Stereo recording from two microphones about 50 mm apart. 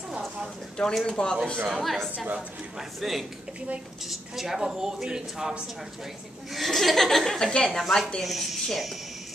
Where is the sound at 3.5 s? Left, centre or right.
Right.